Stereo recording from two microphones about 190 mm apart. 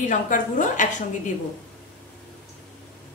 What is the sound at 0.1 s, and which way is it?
Speech, 40° left (ahead or behind).